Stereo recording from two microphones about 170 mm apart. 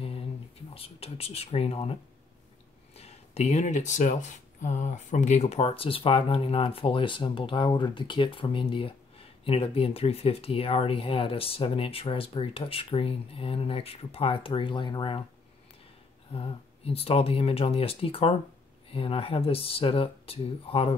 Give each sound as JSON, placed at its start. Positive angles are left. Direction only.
{"t": 0.7, "sound": "speech", "side_deg": 35}
{"t": 16.3, "sound": "speech", "side_deg": 35}